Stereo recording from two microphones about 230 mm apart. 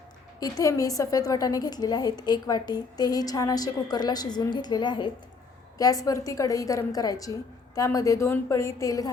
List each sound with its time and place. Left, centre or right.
0.3 s a woman's voice: centre